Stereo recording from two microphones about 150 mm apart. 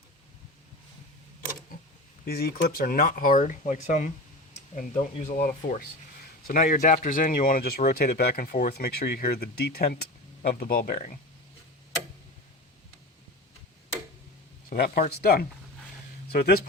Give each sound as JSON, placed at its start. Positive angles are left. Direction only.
{"t": 2.2, "sound": "speech", "side_deg": 90}
{"t": 7.9, "sound": "speech", "side_deg": 90}
{"t": 14.7, "sound": "speech", "side_deg": 90}